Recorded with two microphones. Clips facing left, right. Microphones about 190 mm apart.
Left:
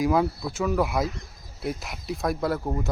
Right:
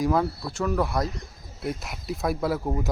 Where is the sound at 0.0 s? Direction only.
5° left (ahead or behind).